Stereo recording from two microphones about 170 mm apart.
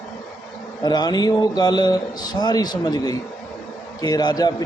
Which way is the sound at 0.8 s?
25° left (ahead or behind).